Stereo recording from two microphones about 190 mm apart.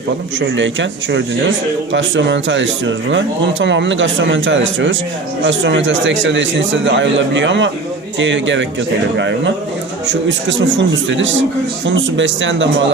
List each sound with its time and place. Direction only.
0.3 s a man's voice: 75° right (ahead or behind)
10.8 s a man's voice: 75° right (ahead or behind)